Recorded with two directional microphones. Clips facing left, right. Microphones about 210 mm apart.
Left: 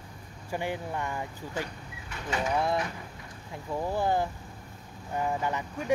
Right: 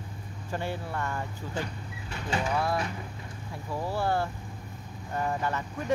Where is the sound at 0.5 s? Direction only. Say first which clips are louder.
Left 1 dB; 15° left (ahead or behind).